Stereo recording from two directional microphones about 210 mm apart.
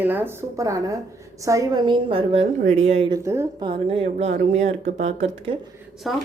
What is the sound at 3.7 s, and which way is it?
Speech, 25° right (ahead or behind).